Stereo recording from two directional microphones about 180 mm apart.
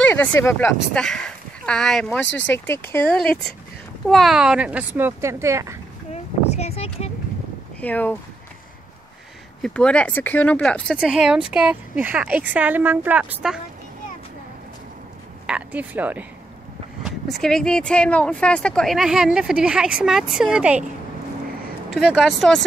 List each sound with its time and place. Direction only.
0.0 s a sound: 10° left (ahead or behind)
0.4 s speech: 10° left (ahead or behind); by 5.8 s 15° right (ahead or behind)
6.1 s a sound: 35° left (ahead or behind)
7.8 s speech: 10° left (ahead or behind)
9.6 s speech: 5° left (ahead or behind)
15.4 s speech: 5° right (ahead or behind)
17.0 s speech: centre (ahead or behind)
21.9 s speech: centre (ahead or behind)